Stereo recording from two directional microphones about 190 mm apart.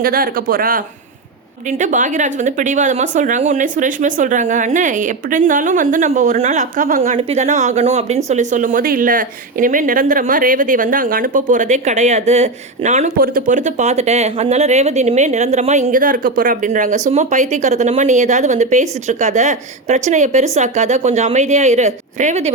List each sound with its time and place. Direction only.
0.0 s speech: 50° right (ahead or behind)